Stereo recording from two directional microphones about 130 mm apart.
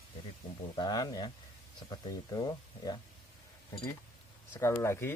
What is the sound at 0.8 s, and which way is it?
Speech, 30° left (ahead or behind).